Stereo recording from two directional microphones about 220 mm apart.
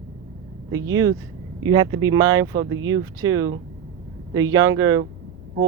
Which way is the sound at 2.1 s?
15° right (ahead or behind).